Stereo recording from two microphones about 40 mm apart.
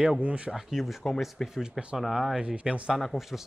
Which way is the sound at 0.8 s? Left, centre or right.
Centre.